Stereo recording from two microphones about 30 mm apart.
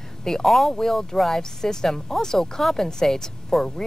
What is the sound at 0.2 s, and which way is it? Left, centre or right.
Speech, centre.